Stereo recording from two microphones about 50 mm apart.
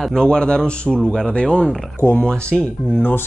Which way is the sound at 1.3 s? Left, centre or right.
Left.